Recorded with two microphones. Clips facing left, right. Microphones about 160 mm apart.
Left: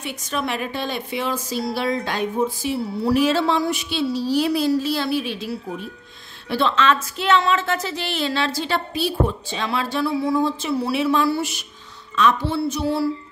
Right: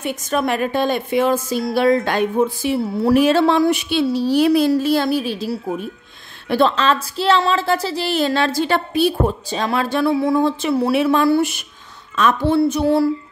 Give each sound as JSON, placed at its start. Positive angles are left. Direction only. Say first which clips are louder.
{"t": 0.0, "sound": "a woman's voice", "louder": "right 6 dB", "side_deg": -50}